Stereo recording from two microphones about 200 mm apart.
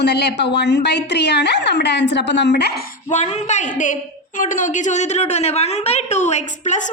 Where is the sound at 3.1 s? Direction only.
35° left (ahead or behind).